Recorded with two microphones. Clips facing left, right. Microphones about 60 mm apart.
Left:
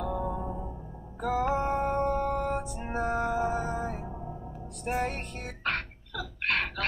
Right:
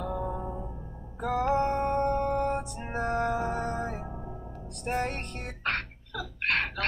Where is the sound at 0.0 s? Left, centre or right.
Centre.